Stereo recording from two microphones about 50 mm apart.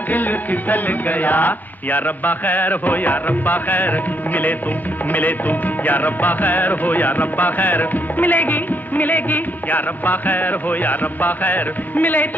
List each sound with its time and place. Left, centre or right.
0.1 s music: left